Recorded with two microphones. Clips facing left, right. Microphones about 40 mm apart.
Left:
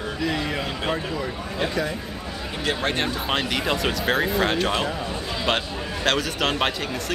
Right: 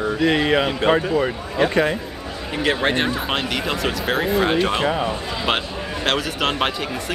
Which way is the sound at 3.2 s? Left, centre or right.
Centre.